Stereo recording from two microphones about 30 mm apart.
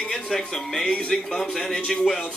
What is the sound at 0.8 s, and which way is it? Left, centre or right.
Speech, left.